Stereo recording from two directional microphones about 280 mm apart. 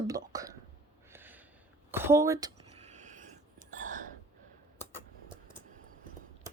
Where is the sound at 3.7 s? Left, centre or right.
Right.